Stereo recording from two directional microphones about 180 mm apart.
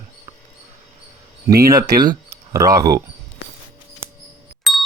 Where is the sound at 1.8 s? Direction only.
55° right (ahead or behind).